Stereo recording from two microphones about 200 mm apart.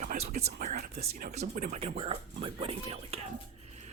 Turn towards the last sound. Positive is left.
turn(degrees=-30)  # may be behind; listen again after turning